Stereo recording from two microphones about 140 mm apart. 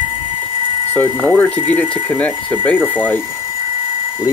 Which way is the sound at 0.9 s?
15° left (ahead or behind).